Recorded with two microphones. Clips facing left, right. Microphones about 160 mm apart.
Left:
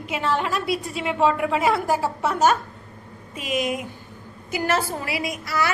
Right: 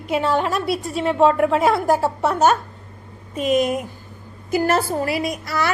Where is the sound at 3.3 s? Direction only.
45° right (ahead or behind).